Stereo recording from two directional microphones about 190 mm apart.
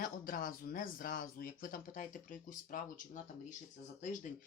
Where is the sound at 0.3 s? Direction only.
45° left (ahead or behind).